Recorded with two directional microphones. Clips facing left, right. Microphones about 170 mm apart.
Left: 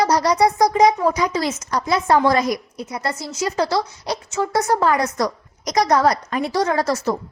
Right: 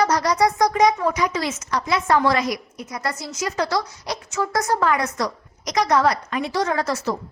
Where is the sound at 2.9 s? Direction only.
25° left (ahead or behind).